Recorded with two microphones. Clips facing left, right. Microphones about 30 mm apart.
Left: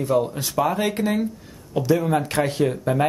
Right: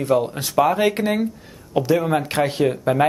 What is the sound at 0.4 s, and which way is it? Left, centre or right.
Speech, centre.